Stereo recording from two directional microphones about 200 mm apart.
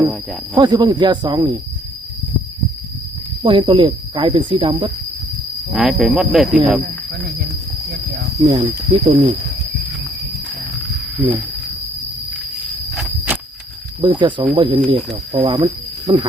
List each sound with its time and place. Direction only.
0.5 s speech: 20° right (ahead or behind)
3.4 s speech: 25° right (ahead or behind)
5.7 s speech: centre (ahead or behind)
6.8 s speech: 50° right (ahead or behind)
8.4 s speech: 15° right (ahead or behind)
12.9 s insect: 5° right (ahead or behind)
14.0 s speech: 25° right (ahead or behind)